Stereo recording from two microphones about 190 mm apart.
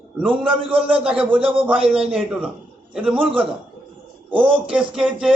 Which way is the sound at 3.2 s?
30° right (ahead or behind).